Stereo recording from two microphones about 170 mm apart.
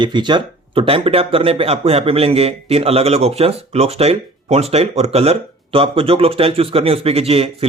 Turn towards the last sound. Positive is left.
turn(degrees=-35)  # may be behind; listen again after turning